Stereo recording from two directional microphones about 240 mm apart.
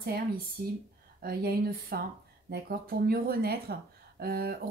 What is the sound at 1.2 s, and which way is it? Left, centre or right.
A woman's voice, right.